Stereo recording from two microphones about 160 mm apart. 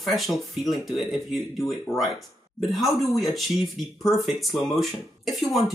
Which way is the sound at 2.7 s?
Centre (ahead or behind).